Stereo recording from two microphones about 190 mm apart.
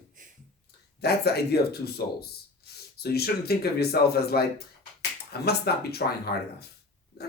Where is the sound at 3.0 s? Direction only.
55° left (ahead or behind).